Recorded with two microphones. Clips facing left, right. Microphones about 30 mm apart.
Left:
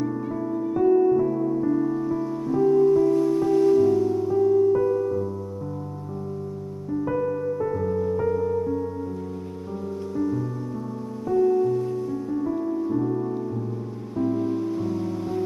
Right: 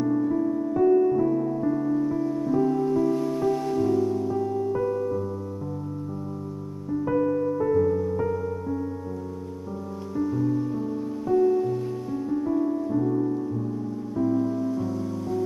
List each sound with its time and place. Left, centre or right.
0.3 s music: centre
6.9 s music: centre
10.1 s music: centre
14.1 s music: left